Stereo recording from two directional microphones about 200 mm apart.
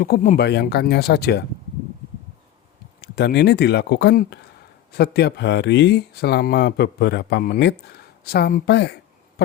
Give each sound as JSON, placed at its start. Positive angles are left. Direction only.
{"t": 0.0, "sound": "speech", "side_deg": 45}
{"t": 0.3, "sound": "speech", "side_deg": 55}
{"t": 3.0, "sound": "speech", "side_deg": 55}